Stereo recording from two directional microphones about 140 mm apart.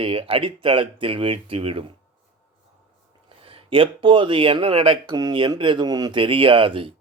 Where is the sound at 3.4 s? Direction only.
40° right (ahead or behind).